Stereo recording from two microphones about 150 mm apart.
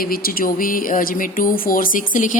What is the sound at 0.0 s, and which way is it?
Speech, 75° left (ahead or behind).